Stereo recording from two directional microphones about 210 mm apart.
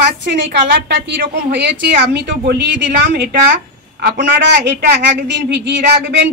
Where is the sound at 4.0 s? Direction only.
50° right (ahead or behind).